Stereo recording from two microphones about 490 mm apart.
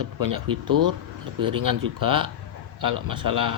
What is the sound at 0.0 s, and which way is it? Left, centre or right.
Speech, right.